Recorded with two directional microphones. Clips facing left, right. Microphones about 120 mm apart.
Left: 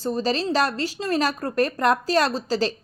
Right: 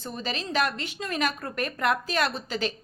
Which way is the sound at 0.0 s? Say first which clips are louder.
Left 10 dB; 35° left (ahead or behind).